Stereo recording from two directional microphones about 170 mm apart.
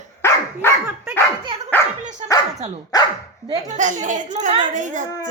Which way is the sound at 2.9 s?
20° left (ahead or behind).